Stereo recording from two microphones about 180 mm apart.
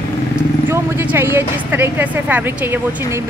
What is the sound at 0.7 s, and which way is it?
A woman's voice, 10° right (ahead or behind).